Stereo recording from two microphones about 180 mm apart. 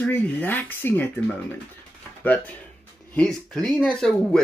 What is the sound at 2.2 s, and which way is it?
Speech, 10° left (ahead or behind).